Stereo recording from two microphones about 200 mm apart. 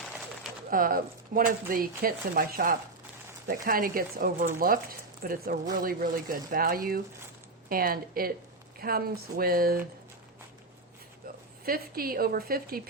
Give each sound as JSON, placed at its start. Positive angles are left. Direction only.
{"t": 0.7, "sound": "speech", "side_deg": -45}
{"t": 11.6, "sound": "speech", "side_deg": -50}